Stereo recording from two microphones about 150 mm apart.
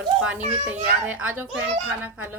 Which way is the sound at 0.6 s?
10° right (ahead or behind).